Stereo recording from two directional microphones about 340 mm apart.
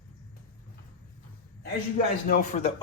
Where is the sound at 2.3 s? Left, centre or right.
Centre.